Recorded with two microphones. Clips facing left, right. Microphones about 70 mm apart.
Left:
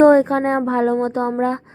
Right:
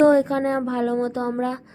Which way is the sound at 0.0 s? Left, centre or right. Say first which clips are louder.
Left 4 dB; left.